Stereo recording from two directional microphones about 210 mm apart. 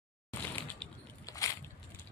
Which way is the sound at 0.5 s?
10° left (ahead or behind).